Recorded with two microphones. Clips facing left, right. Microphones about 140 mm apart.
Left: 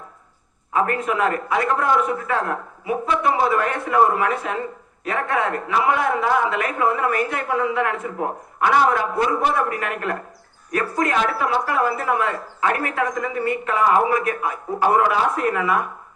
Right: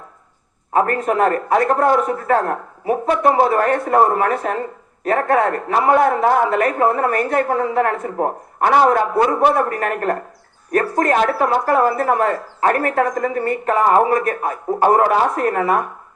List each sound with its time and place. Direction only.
0.7 s a man's voice: 45° right (ahead or behind)